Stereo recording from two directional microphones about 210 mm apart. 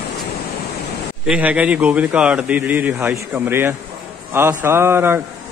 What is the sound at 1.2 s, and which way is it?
A man's voice, 5° right (ahead or behind).